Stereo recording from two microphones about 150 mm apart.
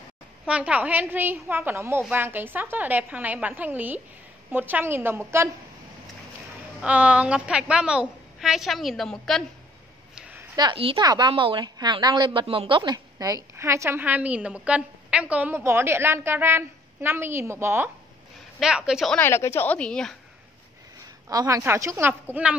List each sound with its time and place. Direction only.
0.5 s a woman's voice: 10° right (ahead or behind)
6.8 s a woman's voice: 10° right (ahead or behind)
10.1 s a sound: 10° right (ahead or behind)
10.5 s a woman's voice: 30° right (ahead or behind)
18.6 s a woman's voice: 5° right (ahead or behind)
19.1 s a woman's voice: 15° left (ahead or behind)
21.3 s a woman's voice: 25° right (ahead or behind)